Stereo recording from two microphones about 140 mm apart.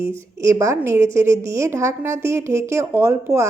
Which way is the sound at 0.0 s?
20° right (ahead or behind).